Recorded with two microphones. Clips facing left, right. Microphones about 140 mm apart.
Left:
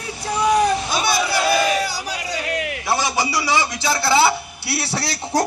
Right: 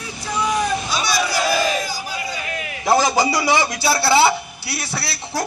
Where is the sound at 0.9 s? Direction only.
55° left (ahead or behind).